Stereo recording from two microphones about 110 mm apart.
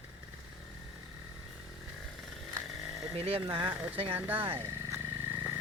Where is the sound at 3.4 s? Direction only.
45° right (ahead or behind).